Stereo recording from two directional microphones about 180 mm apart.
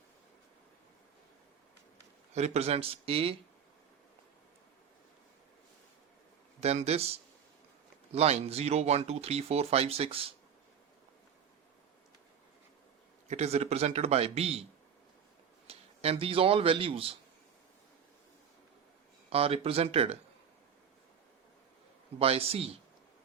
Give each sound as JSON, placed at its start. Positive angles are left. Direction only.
{"t": 2.3, "sound": "speech", "side_deg": -35}
{"t": 6.6, "sound": "speech", "side_deg": -35}
{"t": 8.1, "sound": "speech", "side_deg": -35}
{"t": 13.2, "sound": "speech", "side_deg": -35}
{"t": 15.6, "sound": "speech", "side_deg": -35}
{"t": 19.3, "sound": "speech", "side_deg": -35}
{"t": 22.2, "sound": "speech", "side_deg": -30}